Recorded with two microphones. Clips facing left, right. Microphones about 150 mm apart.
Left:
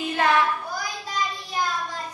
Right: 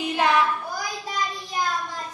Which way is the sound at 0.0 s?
15° right (ahead or behind).